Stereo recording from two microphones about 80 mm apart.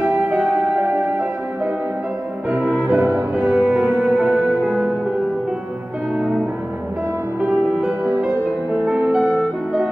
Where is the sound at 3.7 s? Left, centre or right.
Centre.